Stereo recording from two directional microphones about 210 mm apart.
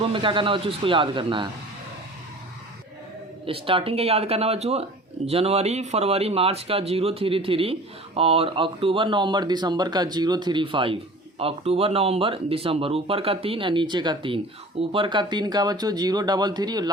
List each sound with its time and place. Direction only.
0.0 s speech: 25° right (ahead or behind)
3.4 s speech: 25° right (ahead or behind)